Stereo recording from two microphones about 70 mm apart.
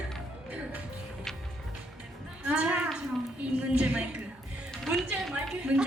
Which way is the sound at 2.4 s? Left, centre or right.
Centre.